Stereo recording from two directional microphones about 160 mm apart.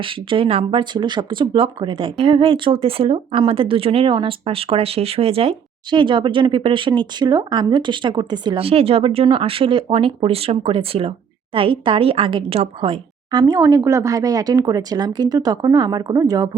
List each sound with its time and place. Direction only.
0.0 s speech: 35° right (ahead or behind)
13.4 s a woman's voice: 20° right (ahead or behind)